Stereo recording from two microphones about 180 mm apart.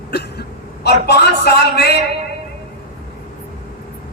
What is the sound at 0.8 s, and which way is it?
Speech, 65° left (ahead or behind).